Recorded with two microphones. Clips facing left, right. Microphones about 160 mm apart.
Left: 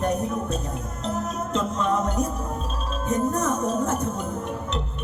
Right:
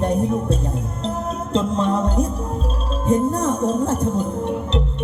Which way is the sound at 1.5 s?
30° right (ahead or behind).